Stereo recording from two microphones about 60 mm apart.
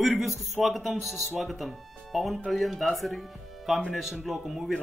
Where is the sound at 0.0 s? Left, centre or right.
Centre.